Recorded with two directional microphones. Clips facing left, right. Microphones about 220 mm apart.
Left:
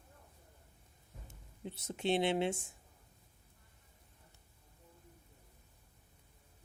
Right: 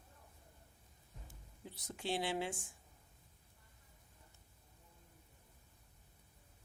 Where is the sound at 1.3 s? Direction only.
25° left (ahead or behind).